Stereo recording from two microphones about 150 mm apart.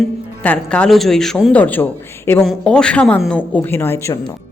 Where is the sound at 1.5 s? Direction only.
10° left (ahead or behind).